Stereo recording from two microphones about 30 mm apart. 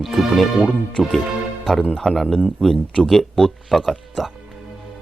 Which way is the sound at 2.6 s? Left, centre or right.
Left.